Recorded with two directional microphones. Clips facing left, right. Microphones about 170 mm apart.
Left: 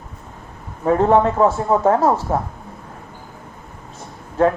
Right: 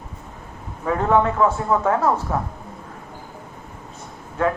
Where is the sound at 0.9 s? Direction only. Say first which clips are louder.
Left 4 dB; 30° left (ahead or behind).